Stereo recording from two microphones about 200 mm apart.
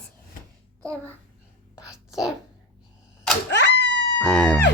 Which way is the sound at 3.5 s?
60° left (ahead or behind).